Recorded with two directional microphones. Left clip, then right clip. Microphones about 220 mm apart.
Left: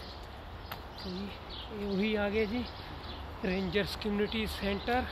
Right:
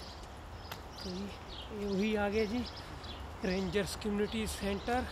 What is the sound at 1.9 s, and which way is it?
Speech, 20° right (ahead or behind).